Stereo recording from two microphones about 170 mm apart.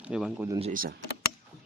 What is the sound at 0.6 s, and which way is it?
Speech, 50° right (ahead or behind).